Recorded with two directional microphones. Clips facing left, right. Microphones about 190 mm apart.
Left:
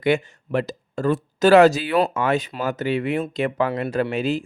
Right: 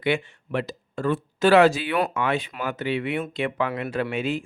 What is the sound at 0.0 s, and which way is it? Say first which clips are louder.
Speech: left 4 dB; 40° left (ahead or behind).